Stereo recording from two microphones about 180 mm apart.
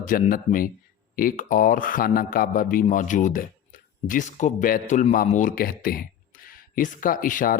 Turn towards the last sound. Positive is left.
turn(degrees=50)  # may be behind; listen again after turning